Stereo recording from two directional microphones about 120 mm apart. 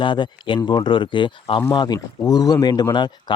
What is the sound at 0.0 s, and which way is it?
Speech, 40° left (ahead or behind).